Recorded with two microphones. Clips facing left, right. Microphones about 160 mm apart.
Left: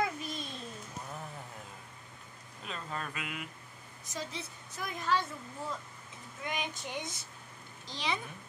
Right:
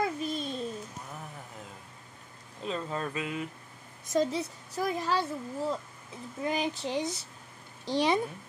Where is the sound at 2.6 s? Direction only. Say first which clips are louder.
Right 7 dB; 30° right (ahead or behind).